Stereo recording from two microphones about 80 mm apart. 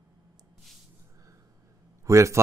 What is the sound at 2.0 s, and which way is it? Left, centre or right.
Speech, right.